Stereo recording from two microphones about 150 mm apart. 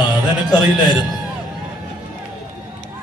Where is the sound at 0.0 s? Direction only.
30° left (ahead or behind).